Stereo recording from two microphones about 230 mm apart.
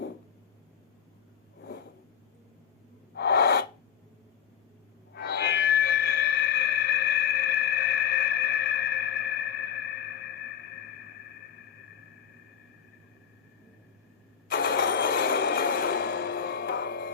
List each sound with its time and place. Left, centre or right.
3.2 s gasp: left
5.1 s music: left
14.5 s a sound: left